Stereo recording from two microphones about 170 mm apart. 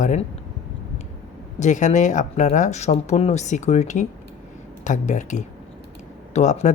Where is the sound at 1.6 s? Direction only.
45° left (ahead or behind).